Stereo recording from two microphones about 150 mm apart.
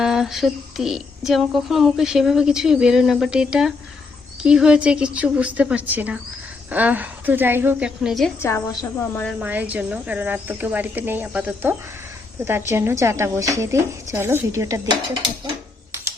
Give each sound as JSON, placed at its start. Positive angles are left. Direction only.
{"t": 0.0, "sound": "speech", "side_deg": -5}
{"t": 8.4, "sound": "a woman's voice", "side_deg": 15}
{"t": 9.4, "sound": "a woman's voice", "side_deg": -10}